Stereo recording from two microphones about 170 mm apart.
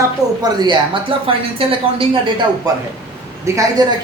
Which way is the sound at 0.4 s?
25° right (ahead or behind).